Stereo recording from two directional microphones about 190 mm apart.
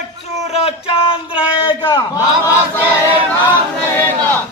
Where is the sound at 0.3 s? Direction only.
35° left (ahead or behind).